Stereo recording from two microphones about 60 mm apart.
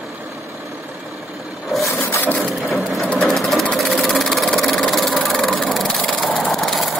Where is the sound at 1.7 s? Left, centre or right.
Centre.